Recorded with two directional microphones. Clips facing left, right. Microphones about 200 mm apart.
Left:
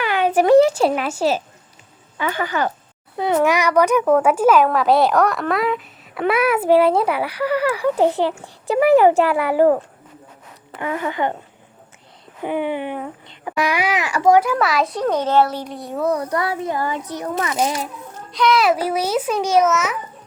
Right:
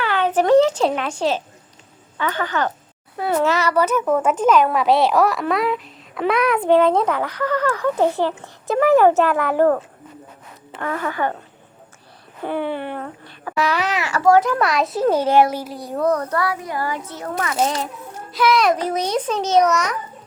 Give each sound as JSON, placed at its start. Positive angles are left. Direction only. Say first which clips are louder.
{"t": 0.0, "sound": "speech", "louder": "left 2 dB", "side_deg": 10}
{"t": 12.4, "sound": "speech", "louder": "left 1 dB", "side_deg": 15}
{"t": 16.4, "sound": "a child's voice", "louder": "left 1 dB", "side_deg": 25}
{"t": 18.3, "sound": "speech", "louder": "even", "side_deg": -5}